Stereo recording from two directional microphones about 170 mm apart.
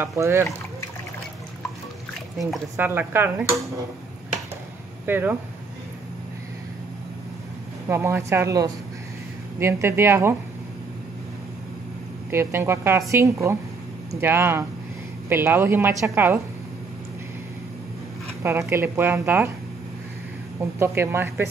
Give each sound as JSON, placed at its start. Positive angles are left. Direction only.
{"t": 0.0, "sound": "a woman's voice", "side_deg": -15}
{"t": 2.8, "sound": "a woman's voice", "side_deg": -15}
{"t": 5.0, "sound": "a woman's voice", "side_deg": -10}
{"t": 7.9, "sound": "a woman's voice", "side_deg": -15}
{"t": 12.3, "sound": "a woman's voice", "side_deg": -15}
{"t": 18.4, "sound": "a woman's voice", "side_deg": -15}
{"t": 20.8, "sound": "a woman's voice", "side_deg": -15}